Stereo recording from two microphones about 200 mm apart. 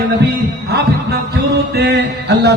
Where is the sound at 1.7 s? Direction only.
55° right (ahead or behind).